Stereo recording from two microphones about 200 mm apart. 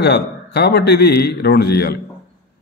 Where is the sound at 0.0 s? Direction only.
55° left (ahead or behind).